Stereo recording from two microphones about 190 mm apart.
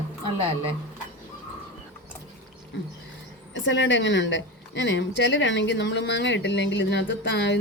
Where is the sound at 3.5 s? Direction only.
70° left (ahead or behind).